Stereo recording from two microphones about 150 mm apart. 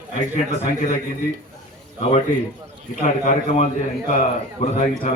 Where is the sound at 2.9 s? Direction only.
60° left (ahead or behind).